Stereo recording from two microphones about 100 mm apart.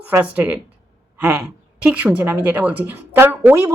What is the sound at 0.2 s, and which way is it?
A woman's voice, 15° right (ahead or behind).